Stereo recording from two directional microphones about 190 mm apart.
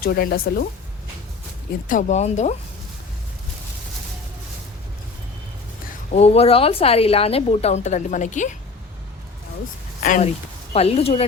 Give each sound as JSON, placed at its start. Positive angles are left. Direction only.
{"t": 0.0, "sound": "speech", "side_deg": 55}
{"t": 1.9, "sound": "a woman's voice", "side_deg": 40}
{"t": 6.1, "sound": "a woman's voice", "side_deg": 35}
{"t": 10.0, "sound": "speech", "side_deg": 40}